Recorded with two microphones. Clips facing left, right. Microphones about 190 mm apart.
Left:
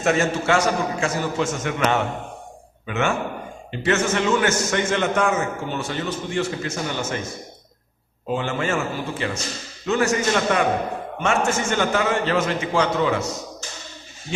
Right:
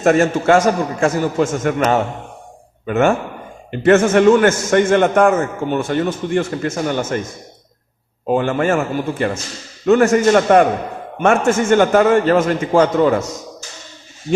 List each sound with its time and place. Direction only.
0.0 s a man's voice: 50° right (ahead or behind)
8.3 s a man's voice: 50° right (ahead or behind)